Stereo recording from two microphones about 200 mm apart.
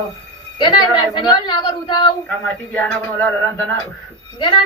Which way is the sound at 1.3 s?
20° left (ahead or behind).